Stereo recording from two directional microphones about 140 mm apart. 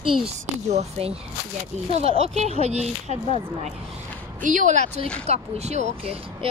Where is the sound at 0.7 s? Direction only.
50° right (ahead or behind).